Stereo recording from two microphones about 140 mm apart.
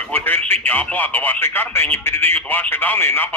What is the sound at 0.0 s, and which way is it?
Speech, 15° left (ahead or behind).